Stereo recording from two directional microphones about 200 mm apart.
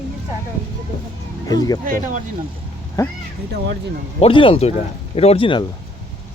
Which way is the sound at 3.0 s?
15° left (ahead or behind).